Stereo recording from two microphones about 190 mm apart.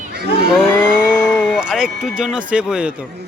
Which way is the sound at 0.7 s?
5° left (ahead or behind).